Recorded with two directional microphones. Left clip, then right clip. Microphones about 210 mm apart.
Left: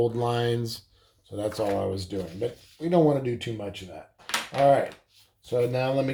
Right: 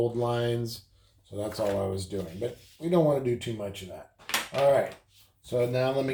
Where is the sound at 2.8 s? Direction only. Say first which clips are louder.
Left 2 dB; 40° left (ahead or behind).